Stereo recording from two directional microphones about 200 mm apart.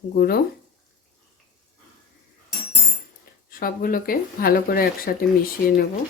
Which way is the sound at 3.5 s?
45° left (ahead or behind).